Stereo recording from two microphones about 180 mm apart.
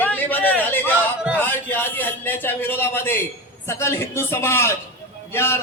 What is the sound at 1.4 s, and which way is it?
A man's voice, 10° left (ahead or behind).